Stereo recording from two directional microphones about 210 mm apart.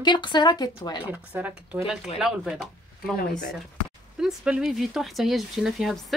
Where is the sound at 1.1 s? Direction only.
10° right (ahead or behind).